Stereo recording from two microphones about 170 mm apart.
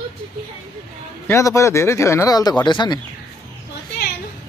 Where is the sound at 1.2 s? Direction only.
15° left (ahead or behind).